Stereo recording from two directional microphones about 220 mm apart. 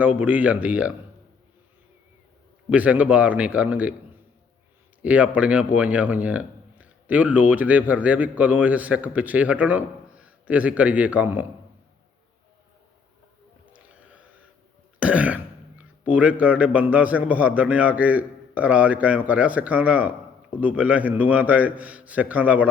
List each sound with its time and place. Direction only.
0.0 s speech: 5° right (ahead or behind)
2.6 s a man's voice: 5° right (ahead or behind)
5.0 s a man's voice: 5° right (ahead or behind)
13.7 s boat: 5° right (ahead or behind)
14.9 s throat clearing: 5° right (ahead or behind)
16.0 s speech: 5° right (ahead or behind)